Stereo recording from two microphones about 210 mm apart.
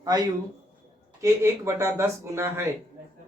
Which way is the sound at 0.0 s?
20° right (ahead or behind).